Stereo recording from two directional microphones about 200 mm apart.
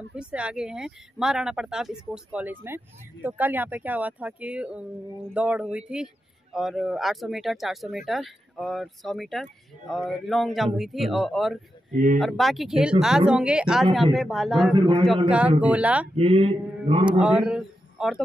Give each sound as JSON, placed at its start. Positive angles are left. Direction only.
{"t": 0.1, "sound": "speech", "side_deg": -5}
{"t": 14.7, "sound": "mantra", "side_deg": -25}
{"t": 15.2, "sound": "speech", "side_deg": -5}
{"t": 16.2, "sound": "mantra", "side_deg": -30}
{"t": 17.2, "sound": "a man's voice", "side_deg": -5}